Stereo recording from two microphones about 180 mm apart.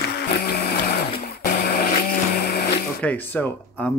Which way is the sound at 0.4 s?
60° left (ahead or behind).